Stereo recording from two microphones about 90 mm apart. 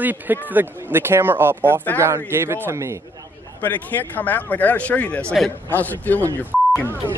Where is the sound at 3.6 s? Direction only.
20° left (ahead or behind).